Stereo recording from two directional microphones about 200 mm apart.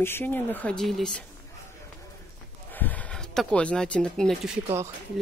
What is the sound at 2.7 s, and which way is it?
Speech, 10° left (ahead or behind).